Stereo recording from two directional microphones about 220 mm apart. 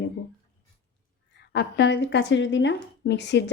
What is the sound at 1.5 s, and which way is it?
A woman's voice, 50° left (ahead or behind).